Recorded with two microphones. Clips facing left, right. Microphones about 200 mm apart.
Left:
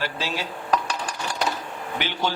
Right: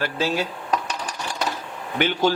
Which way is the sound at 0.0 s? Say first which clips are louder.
Right 5 dB; 50° right (ahead or behind).